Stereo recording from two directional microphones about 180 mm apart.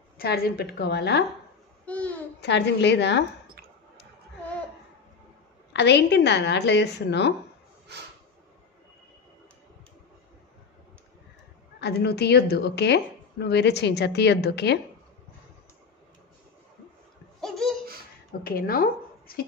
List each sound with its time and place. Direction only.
0.2 s a woman's voice: 60° left (ahead or behind)
1.9 s a child's voice: 10° left (ahead or behind)
2.4 s speech: 70° left (ahead or behind)
5.7 s speech: 75° left (ahead or behind)
7.9 s a sound: 70° right (ahead or behind)
11.8 s speech: 65° left (ahead or behind)
17.4 s a sound: centre (ahead or behind)
18.4 s a woman's voice: 55° left (ahead or behind)